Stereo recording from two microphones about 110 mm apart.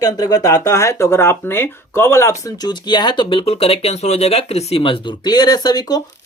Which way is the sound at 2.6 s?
45° left (ahead or behind).